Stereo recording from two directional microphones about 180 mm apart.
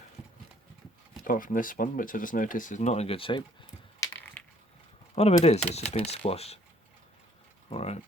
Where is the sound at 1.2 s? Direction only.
50° left (ahead or behind); by 3.4 s 30° left (ahead or behind).